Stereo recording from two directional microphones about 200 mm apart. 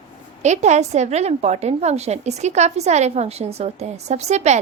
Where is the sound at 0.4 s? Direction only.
35° right (ahead or behind).